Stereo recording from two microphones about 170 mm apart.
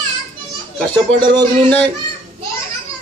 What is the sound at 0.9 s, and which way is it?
Speech, 25° right (ahead or behind).